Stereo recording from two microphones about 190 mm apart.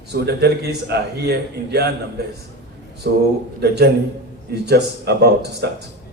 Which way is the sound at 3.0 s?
50° right (ahead or behind).